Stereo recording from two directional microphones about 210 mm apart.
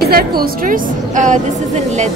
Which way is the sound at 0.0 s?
45° right (ahead or behind).